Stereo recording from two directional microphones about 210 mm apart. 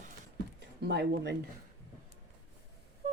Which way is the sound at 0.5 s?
50° right (ahead or behind).